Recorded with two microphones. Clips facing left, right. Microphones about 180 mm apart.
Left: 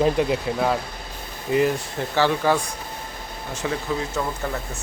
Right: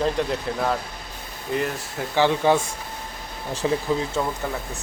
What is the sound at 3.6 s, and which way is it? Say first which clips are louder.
Speech: right 4 dB; 25° right (ahead or behind).